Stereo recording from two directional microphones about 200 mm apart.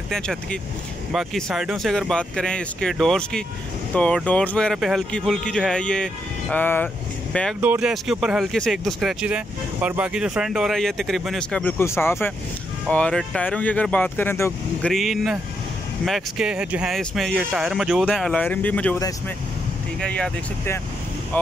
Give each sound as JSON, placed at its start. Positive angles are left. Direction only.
{"t": 0.1, "sound": "speech", "side_deg": 0}
{"t": 7.6, "sound": "speech", "side_deg": -5}
{"t": 14.9, "sound": "speech", "side_deg": 0}
{"t": 20.0, "sound": "speech", "side_deg": 5}